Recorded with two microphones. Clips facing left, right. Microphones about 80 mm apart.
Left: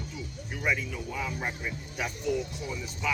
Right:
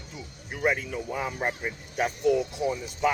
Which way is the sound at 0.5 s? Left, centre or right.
Right.